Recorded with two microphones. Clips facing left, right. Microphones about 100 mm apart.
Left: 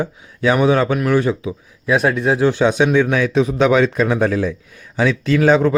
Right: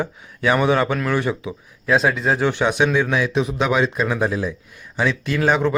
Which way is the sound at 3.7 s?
45° left (ahead or behind).